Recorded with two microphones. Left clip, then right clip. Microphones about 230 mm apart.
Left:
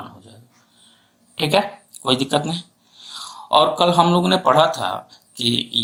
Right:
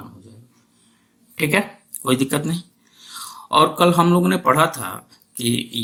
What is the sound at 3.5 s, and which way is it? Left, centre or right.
Speech, right.